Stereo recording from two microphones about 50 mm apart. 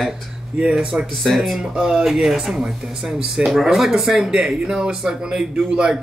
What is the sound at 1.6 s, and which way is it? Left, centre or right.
Speech, centre.